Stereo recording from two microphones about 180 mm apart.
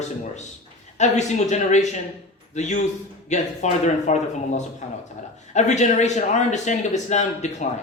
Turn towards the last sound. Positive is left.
turn(degrees=40)  # may be behind; listen again after turning